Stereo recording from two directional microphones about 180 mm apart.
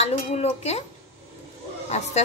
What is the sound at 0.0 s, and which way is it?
Speech, 35° left (ahead or behind).